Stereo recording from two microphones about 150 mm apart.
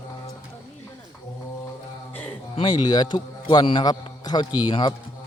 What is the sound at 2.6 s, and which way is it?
A man's voice, 30° left (ahead or behind).